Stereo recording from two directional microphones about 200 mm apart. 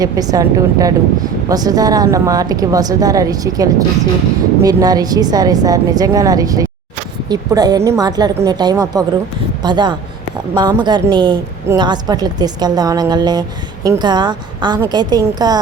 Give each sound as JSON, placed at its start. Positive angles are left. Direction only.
{"t": 0.0, "sound": "a woman's voice", "side_deg": -20}